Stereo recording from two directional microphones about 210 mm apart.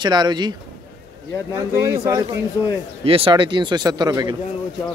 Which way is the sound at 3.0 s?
25° right (ahead or behind).